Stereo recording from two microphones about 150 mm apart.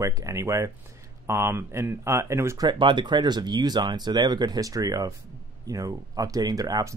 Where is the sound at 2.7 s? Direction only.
30° right (ahead or behind).